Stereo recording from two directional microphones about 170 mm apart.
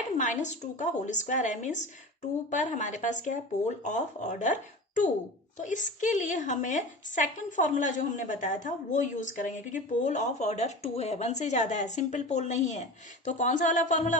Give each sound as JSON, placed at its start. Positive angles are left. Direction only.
{"t": 0.2, "sound": "a woman's voice", "side_deg": 45}